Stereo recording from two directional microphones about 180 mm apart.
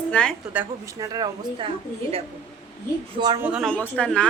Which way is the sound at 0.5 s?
20° right (ahead or behind).